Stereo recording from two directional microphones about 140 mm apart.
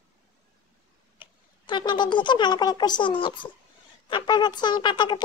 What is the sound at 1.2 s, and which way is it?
Speech, 35° left (ahead or behind).